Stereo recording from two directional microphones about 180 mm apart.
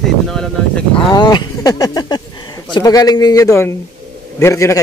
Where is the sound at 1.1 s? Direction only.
25° left (ahead or behind).